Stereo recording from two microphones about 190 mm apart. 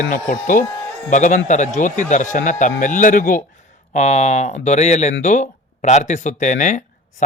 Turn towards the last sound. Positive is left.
turn(degrees=40)  # may be behind; listen again after turning